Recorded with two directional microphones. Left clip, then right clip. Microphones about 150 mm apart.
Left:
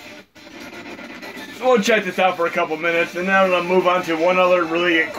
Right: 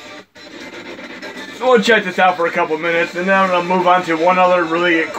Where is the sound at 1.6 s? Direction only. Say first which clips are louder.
Right 4 dB; 40° right (ahead or behind).